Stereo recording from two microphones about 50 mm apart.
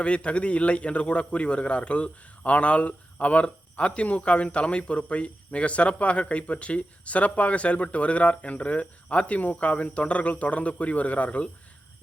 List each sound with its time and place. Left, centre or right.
0.0 s a man's voice: left